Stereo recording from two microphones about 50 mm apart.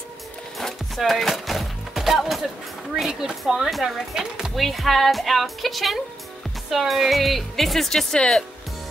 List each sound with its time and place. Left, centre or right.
0.6 s music: centre
3.0 s a sound: centre
3.3 s speech: centre
4.6 s speech: centre
8.1 s speech: centre